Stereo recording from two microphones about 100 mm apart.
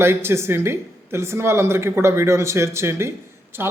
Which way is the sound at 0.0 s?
25° right (ahead or behind).